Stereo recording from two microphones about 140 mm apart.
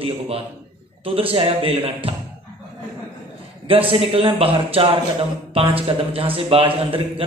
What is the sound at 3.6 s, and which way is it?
A man's voice, 40° right (ahead or behind).